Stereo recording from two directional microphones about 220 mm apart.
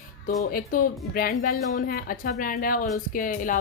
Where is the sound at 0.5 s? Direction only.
40° left (ahead or behind).